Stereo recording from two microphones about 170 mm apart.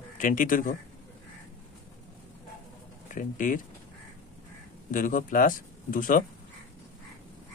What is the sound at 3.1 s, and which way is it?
Speech, 50° left (ahead or behind).